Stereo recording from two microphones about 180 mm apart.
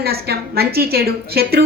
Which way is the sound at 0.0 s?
60° right (ahead or behind).